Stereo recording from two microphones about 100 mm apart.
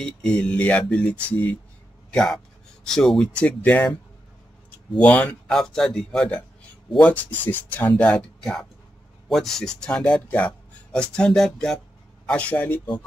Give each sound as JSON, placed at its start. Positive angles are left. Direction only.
{"t": 0.0, "sound": "speech", "side_deg": 10}
{"t": 2.1, "sound": "a man's voice", "side_deg": 5}
{"t": 8.0, "sound": "speech", "side_deg": 10}